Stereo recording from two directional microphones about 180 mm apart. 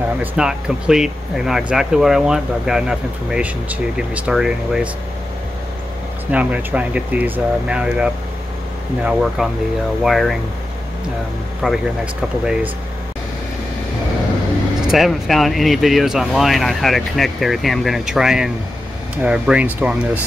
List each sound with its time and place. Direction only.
0.2 s speech: 5° right (ahead or behind)
6.3 s speech: 10° right (ahead or behind)
11.6 s speech: 5° right (ahead or behind)
14.9 s speech: centre (ahead or behind)